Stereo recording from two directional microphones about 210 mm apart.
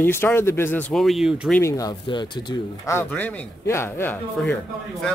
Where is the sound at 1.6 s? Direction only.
15° left (ahead or behind).